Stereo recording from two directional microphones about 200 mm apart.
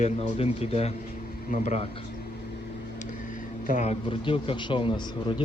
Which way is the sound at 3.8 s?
30° left (ahead or behind).